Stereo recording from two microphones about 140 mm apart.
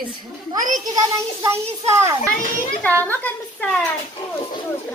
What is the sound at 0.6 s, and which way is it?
Speech, 70° right (ahead or behind).